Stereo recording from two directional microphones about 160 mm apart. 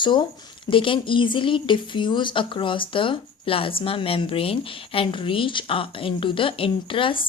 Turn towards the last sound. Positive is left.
turn(degrees=30)  # may be behind; listen again after turning